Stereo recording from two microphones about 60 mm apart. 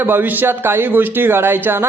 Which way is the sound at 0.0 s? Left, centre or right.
Right.